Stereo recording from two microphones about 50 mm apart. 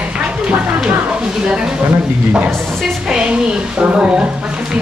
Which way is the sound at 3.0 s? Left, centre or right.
Centre.